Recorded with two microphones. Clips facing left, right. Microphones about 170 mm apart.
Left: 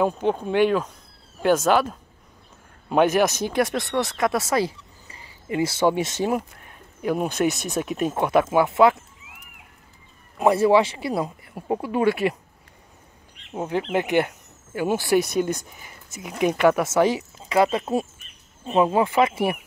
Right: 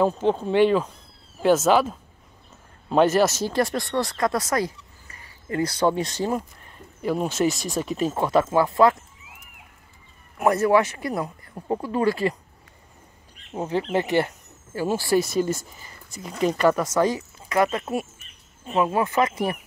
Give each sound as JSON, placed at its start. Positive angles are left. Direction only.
{"t": 0.0, "sound": "speech", "side_deg": 10}
{"t": 1.4, "sound": "speech", "side_deg": -5}
{"t": 2.9, "sound": "speech", "side_deg": 15}
{"t": 3.6, "sound": "speech", "side_deg": 0}
{"t": 5.8, "sound": "speech", "side_deg": 0}
{"t": 6.1, "sound": "speech", "side_deg": 15}
{"t": 6.6, "sound": "speech", "side_deg": 5}
{"t": 8.2, "sound": "speech", "side_deg": 20}
{"t": 8.6, "sound": "speech", "side_deg": 5}
{"t": 10.5, "sound": "speech", "side_deg": 10}
{"t": 13.5, "sound": "speech", "side_deg": 10}
{"t": 15.0, "sound": "speech", "side_deg": 0}
{"t": 17.0, "sound": "speech", "side_deg": 20}